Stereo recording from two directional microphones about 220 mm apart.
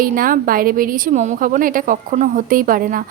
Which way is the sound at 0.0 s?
40° right (ahead or behind).